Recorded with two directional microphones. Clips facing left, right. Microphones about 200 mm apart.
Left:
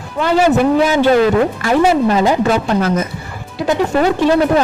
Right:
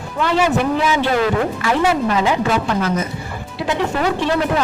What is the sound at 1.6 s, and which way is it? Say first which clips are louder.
Speech: left 4 dB; 40° left (ahead or behind).